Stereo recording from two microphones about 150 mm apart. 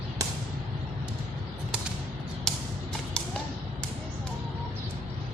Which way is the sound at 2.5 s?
Centre (ahead or behind).